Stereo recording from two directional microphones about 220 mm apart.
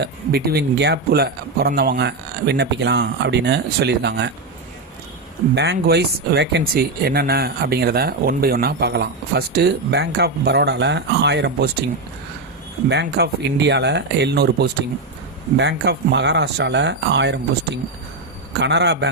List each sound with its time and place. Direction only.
0.0 s speech: 45° right (ahead or behind)
5.5 s speech: 50° right (ahead or behind)
12.9 s speech: 50° right (ahead or behind)